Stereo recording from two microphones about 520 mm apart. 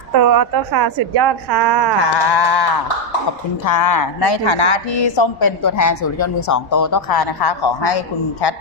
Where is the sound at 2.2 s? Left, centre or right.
Left.